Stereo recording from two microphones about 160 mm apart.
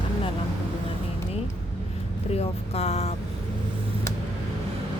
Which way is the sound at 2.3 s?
40° left (ahead or behind).